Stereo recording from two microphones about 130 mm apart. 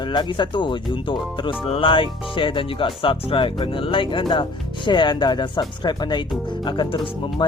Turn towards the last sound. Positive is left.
turn(degrees=35)  # may be behind; listen again after turning